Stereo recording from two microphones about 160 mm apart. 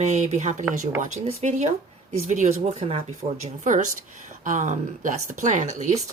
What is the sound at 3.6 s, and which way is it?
Speech, 55° right (ahead or behind).